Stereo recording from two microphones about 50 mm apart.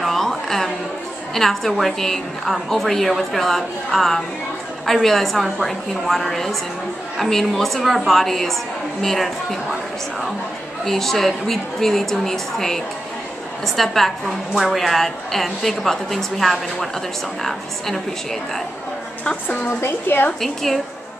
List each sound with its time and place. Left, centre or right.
0.0 s a sound: centre
1.3 s a woman's voice: centre
10.9 s a woman's voice: centre
19.8 s a woman's voice: left
20.3 s a woman's voice: centre